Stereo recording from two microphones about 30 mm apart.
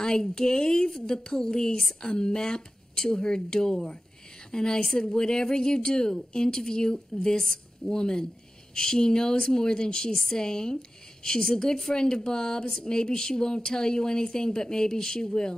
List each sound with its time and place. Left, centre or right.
0.0 s a woman's voice: left